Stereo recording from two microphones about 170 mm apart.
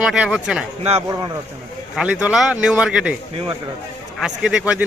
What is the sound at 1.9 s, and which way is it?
A man's voice, 5° right (ahead or behind).